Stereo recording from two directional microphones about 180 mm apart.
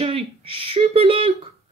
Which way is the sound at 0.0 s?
30° right (ahead or behind).